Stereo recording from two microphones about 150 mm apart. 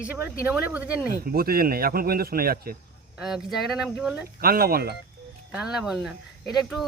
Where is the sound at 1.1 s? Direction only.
85° right.